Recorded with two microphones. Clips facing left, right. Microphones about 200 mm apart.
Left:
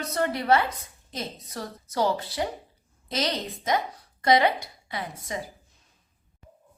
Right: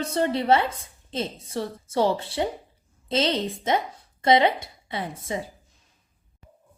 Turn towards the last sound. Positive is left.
turn(degrees=-25)  # may be behind; listen again after turning